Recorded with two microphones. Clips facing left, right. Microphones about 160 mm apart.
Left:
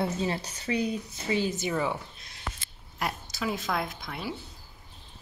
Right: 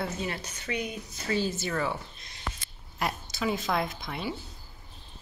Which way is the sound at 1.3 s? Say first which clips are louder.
Left 1 dB; 15° left (ahead or behind).